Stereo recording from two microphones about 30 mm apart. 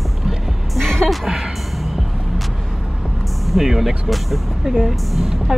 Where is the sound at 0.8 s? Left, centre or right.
Centre.